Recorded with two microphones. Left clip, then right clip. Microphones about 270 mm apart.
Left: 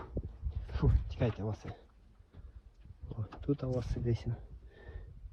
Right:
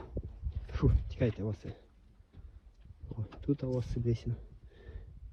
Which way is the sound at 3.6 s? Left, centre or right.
Centre.